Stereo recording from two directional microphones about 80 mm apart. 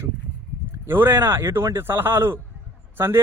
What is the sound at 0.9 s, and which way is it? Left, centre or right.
Speech, right.